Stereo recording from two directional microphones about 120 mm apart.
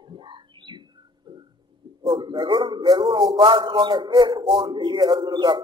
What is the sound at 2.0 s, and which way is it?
A man's voice, 40° right (ahead or behind).